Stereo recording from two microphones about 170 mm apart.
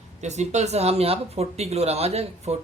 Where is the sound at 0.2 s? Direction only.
40° right (ahead or behind).